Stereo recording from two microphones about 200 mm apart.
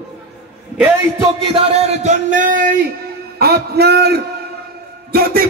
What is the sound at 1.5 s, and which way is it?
A man's voice, 30° right (ahead or behind).